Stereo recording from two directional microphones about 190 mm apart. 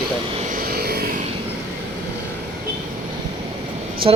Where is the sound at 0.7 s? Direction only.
55° right (ahead or behind).